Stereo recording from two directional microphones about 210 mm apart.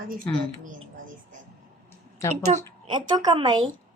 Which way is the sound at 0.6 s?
40° right (ahead or behind).